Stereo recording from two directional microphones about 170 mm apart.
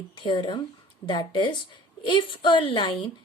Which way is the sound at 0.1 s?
30° left (ahead or behind).